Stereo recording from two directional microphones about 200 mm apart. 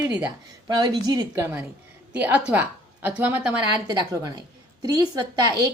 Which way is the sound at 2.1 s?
5° right (ahead or behind).